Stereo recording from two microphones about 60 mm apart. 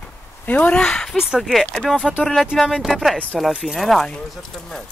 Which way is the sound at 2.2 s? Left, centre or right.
Centre.